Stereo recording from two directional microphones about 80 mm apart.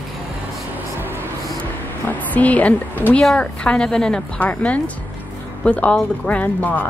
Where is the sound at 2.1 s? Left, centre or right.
Centre.